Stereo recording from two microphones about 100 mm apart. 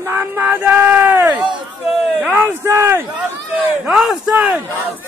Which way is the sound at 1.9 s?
5° right (ahead or behind).